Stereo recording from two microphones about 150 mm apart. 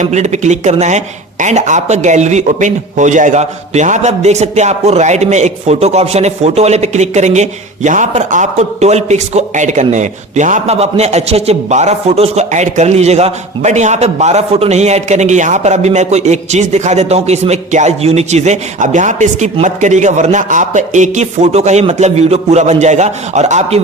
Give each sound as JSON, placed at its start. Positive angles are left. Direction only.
{"t": 0.0, "sound": "speech", "side_deg": -50}